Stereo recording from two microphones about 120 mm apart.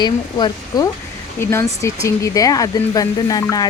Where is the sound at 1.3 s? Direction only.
20° left (ahead or behind).